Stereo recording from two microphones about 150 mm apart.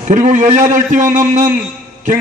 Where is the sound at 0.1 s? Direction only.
55° right (ahead or behind).